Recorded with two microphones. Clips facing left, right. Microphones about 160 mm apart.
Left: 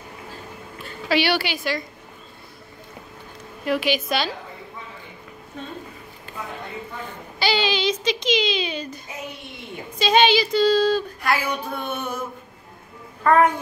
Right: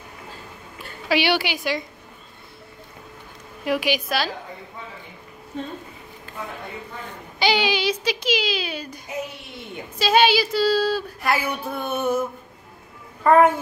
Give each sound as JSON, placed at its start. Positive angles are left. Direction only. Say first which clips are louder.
{"t": 1.0, "sound": "speech", "louder": "even", "side_deg": -15}
{"t": 3.6, "sound": "speech", "louder": "left 1 dB", "side_deg": -15}
{"t": 7.3, "sound": "speech", "louder": "right 1 dB", "side_deg": -15}
{"t": 13.2, "sound": "a child's voice", "louder": "right 2 dB", "side_deg": -10}